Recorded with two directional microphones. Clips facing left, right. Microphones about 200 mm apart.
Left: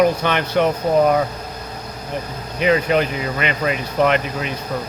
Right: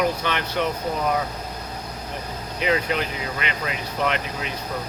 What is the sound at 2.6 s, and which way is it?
Speech, 60° left (ahead or behind).